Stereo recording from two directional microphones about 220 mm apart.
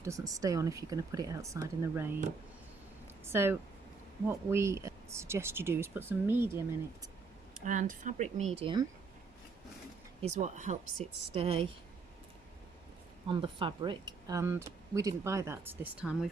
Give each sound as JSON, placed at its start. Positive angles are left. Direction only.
{"t": 0.0, "sound": "speech", "side_deg": -15}
{"t": 3.2, "sound": "speech", "side_deg": -10}
{"t": 7.6, "sound": "speech", "side_deg": -35}
{"t": 10.2, "sound": "speech", "side_deg": -30}
{"t": 13.2, "sound": "speech", "side_deg": -20}